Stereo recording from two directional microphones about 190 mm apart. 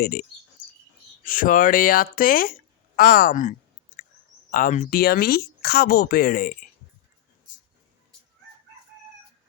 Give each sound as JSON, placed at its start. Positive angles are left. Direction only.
{"t": 0.0, "sound": "speech", "side_deg": 50}
{"t": 3.9, "sound": "a sound", "side_deg": 45}
{"t": 4.5, "sound": "speech", "side_deg": 45}